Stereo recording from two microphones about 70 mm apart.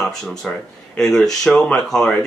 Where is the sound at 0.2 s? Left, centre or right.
Centre.